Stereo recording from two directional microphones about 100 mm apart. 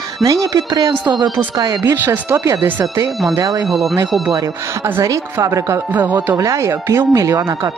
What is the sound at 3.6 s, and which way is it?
Speech, centre (ahead or behind).